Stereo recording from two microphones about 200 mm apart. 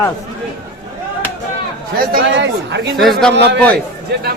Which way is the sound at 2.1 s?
60° right (ahead or behind).